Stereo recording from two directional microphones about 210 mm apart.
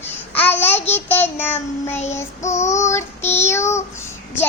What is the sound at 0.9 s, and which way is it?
Child singing, 10° left (ahead or behind).